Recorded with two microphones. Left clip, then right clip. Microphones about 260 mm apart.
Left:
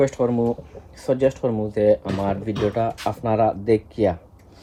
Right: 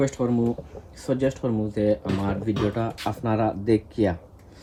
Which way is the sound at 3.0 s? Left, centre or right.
Centre.